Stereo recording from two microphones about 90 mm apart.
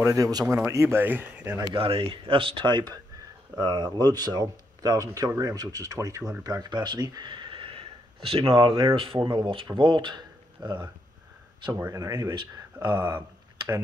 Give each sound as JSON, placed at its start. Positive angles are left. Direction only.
{"t": 0.0, "sound": "speech", "side_deg": -35}
{"t": 0.7, "sound": "speech", "side_deg": -30}
{"t": 1.7, "sound": "speech", "side_deg": -85}
{"t": 6.4, "sound": "speech", "side_deg": -50}
{"t": 11.8, "sound": "speech", "side_deg": -35}